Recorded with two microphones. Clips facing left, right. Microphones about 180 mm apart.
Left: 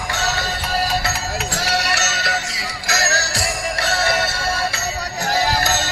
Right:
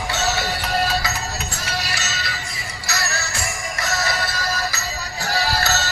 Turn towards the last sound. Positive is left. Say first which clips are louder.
# left 2 dB
turn(degrees=15)  # may be behind; listen again after turning